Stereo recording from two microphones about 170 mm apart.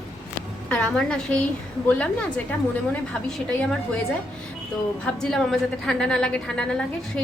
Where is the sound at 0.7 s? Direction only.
5° left (ahead or behind).